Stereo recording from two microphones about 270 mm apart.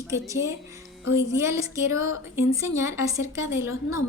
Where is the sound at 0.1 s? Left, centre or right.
Centre.